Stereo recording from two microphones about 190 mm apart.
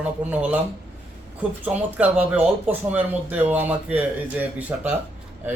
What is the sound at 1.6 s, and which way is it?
Speech, 10° right (ahead or behind).